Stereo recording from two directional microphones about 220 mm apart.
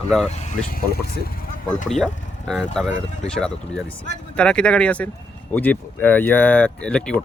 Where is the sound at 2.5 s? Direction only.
Centre (ahead or behind).